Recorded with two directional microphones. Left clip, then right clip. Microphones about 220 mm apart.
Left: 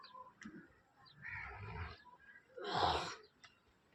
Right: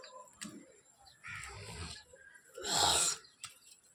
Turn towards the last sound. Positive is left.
turn(degrees=-50)  # may be behind; listen again after turning